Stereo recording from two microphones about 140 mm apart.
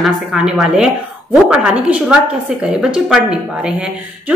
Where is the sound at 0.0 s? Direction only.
5° right (ahead or behind).